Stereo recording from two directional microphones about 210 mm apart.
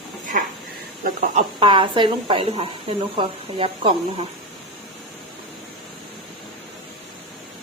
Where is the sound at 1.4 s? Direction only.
25° right (ahead or behind).